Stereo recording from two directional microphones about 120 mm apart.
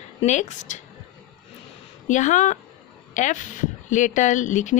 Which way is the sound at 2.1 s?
90° left.